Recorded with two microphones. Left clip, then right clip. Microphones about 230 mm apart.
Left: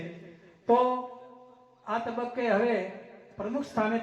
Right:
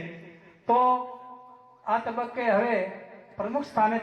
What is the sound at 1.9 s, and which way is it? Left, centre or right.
Speech, right.